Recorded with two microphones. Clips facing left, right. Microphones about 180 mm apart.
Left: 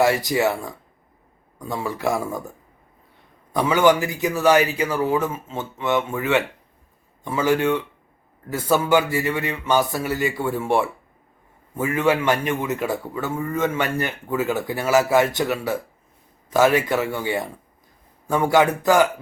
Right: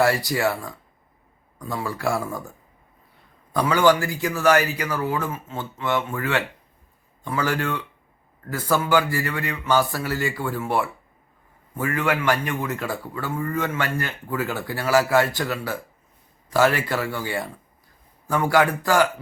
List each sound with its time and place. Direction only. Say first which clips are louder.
0.0 s speech: left 2 dB; 20° left (ahead or behind)
3.5 s speech: left 1 dB; 20° left (ahead or behind)
11.8 s speech: left 4 dB; 20° left (ahead or behind)